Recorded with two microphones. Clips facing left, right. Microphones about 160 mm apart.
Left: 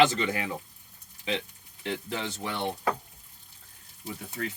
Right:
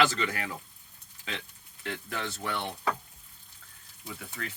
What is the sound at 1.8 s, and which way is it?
Speech, 20° left (ahead or behind).